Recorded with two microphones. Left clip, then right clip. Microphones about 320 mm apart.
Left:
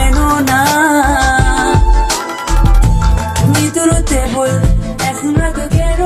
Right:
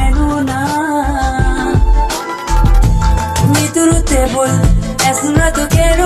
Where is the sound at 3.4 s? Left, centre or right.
Centre.